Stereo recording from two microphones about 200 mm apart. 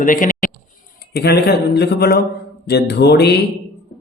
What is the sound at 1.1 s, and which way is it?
Speech, 55° left (ahead or behind).